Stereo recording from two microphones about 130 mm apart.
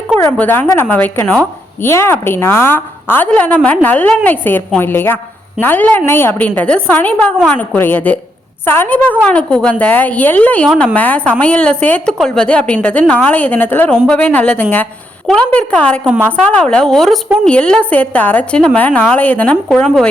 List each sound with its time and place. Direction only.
0.2 s a woman's voice: 15° left (ahead or behind)